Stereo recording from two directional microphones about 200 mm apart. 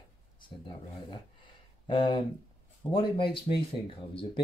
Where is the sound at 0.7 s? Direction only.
25° left (ahead or behind).